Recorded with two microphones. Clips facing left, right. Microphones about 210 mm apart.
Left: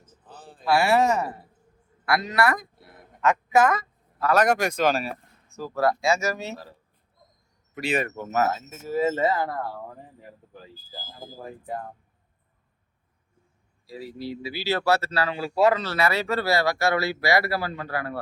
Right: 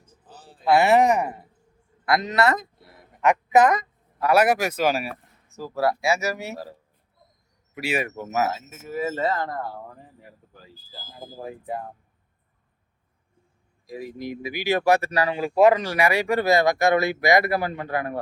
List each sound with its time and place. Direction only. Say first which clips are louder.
0.3 s a sound: left 2 dB; 55° left (ahead or behind)
0.6 s a man's voice: right 3 dB; 20° right (ahead or behind)
7.8 s speech: even; 10° right (ahead or behind)
8.7 s speech: left 4 dB; 30° left (ahead or behind)
9.1 s speech: left 1 dB; 10° left (ahead or behind)
11.4 s speech: right 2 dB; 10° right (ahead or behind)
13.8 s speech: right 2 dB; 15° right (ahead or behind)